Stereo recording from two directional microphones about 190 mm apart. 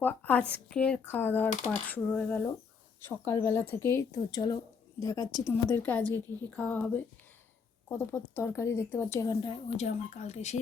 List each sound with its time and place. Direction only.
0.0 s a woman's voice: 5° left (ahead or behind); by 9.6 s 20° left (ahead or behind)
9.7 s speech: 35° left (ahead or behind)